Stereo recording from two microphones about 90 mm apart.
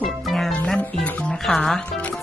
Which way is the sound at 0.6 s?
15° left (ahead or behind).